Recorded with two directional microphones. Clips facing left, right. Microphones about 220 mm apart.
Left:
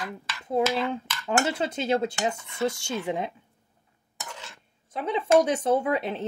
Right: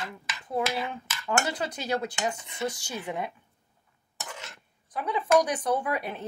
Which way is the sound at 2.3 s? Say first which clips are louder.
Left 1 dB; 20° right (ahead or behind).